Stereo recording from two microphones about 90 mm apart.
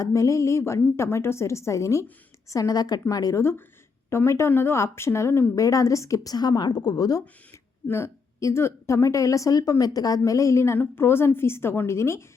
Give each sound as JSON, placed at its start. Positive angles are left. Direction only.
{"t": 0.0, "sound": "a woman's voice", "side_deg": 35}
{"t": 7.9, "sound": "a woman's voice", "side_deg": 30}